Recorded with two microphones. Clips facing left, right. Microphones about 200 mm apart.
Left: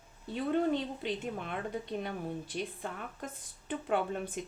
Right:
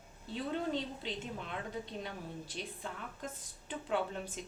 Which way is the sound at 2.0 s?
55° left (ahead or behind).